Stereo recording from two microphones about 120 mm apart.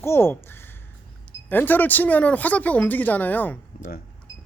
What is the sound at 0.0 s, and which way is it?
Speech, 20° left (ahead or behind).